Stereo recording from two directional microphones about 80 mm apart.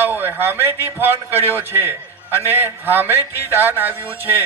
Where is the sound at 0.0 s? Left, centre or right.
Right.